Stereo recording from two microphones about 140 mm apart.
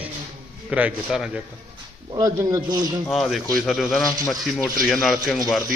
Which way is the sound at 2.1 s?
25° right (ahead or behind).